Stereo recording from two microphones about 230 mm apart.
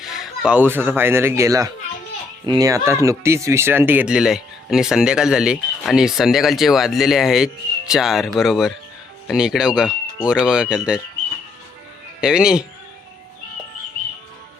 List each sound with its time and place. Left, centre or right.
0.0 s speech: centre
12.2 s speech: centre